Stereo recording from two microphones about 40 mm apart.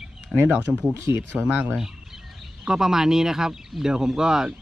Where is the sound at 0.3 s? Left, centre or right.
Centre.